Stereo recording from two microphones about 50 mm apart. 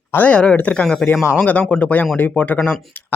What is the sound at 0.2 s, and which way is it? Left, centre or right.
Speech, left.